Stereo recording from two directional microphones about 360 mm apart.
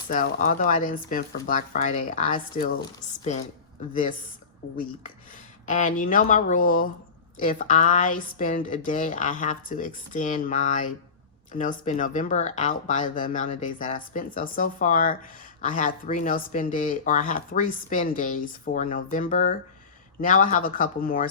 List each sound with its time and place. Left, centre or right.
0.1 s a woman's voice: left
5.6 s speech: left